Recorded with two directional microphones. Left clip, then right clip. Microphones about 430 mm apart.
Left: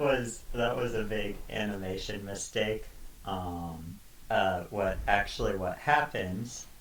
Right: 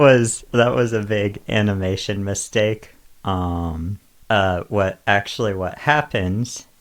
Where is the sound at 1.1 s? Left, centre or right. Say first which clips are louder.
Right 14 dB; right.